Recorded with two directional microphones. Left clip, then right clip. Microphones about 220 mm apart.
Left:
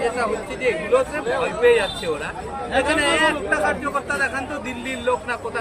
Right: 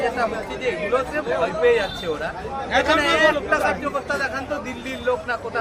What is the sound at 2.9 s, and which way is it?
Speech, centre (ahead or behind).